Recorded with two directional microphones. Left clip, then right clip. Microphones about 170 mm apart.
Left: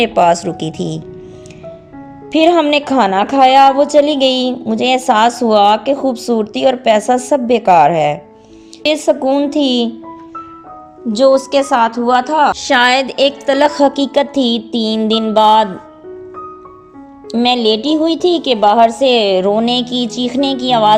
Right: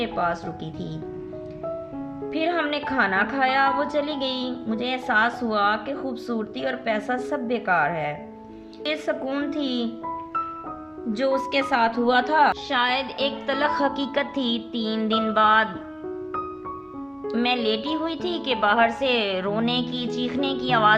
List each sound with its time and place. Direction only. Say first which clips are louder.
0.0 s speech: left 14 dB; 50° left (ahead or behind)
2.3 s a woman's voice: left 14 dB; 40° left (ahead or behind)
11.3 s speech: left 11 dB; 5° right (ahead or behind)
12.5 s speech: left 12 dB; 45° left (ahead or behind); by 15.7 s 30° left (ahead or behind)
17.2 s speech: left 11 dB; 30° left (ahead or behind)